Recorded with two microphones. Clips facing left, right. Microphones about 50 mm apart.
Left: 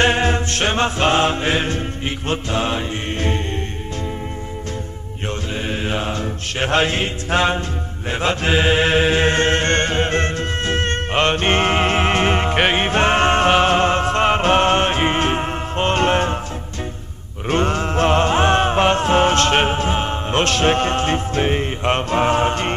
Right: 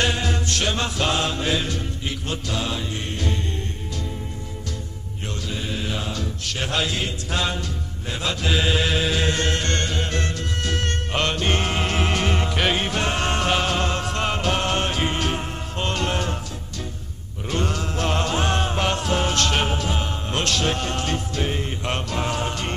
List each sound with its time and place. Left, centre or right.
0.0 s music: left
5.5 s mantra: left
17.5 s music: left